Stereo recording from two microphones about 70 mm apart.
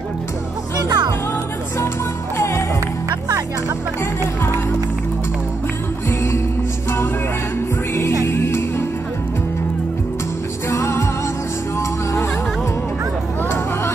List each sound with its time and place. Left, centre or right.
0.7 s music: right
2.3 s music: left
8.3 s music: left
10.7 s music: left